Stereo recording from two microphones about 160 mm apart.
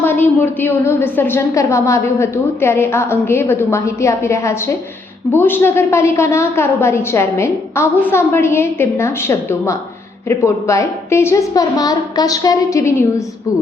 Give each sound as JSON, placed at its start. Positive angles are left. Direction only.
{"t": 0.0, "sound": "a woman's voice", "side_deg": 15}